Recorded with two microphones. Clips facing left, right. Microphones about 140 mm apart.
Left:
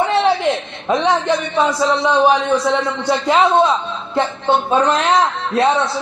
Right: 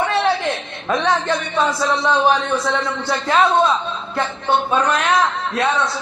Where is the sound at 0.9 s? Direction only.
20° left (ahead or behind).